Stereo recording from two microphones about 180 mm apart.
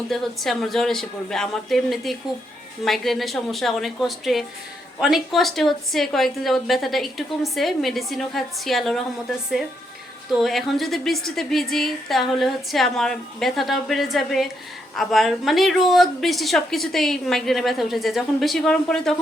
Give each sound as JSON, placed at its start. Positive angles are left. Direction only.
{"t": 0.1, "sound": "a woman's voice", "side_deg": 0}
{"t": 10.3, "sound": "a woman's voice", "side_deg": 0}